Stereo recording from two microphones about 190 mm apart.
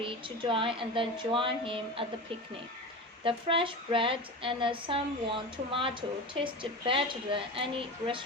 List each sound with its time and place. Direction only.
0.0 s speech: 30° right (ahead or behind)
3.2 s speech: 25° right (ahead or behind)